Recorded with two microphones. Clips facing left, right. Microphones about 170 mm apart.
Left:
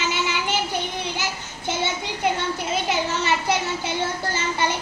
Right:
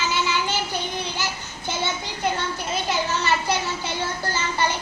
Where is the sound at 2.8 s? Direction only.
20° left (ahead or behind).